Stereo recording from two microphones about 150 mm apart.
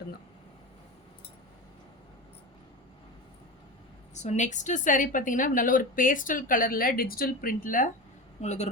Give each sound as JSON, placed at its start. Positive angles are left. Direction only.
{"t": 4.1, "sound": "a woman's voice", "side_deg": 50}
{"t": 8.4, "sound": "a man's voice", "side_deg": 50}